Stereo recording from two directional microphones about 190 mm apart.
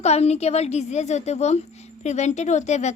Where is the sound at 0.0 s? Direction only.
35° left (ahead or behind).